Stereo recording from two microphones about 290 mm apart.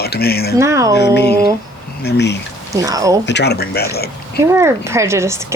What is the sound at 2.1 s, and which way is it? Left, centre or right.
Speech, left.